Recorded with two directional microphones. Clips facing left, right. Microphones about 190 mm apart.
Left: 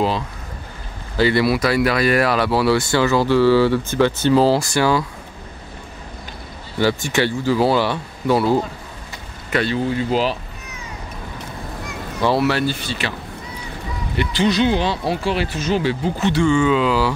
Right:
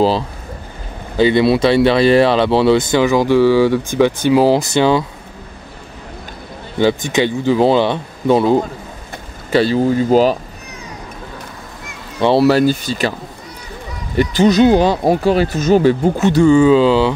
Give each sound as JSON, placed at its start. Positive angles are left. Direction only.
{"t": 1.1, "sound": "speech", "side_deg": -20}
{"t": 6.8, "sound": "speech", "side_deg": -20}
{"t": 9.5, "sound": "speech", "side_deg": -35}
{"t": 12.2, "sound": "speech", "side_deg": -25}
{"t": 12.4, "sound": "speech", "side_deg": -40}
{"t": 14.1, "sound": "speech", "side_deg": -45}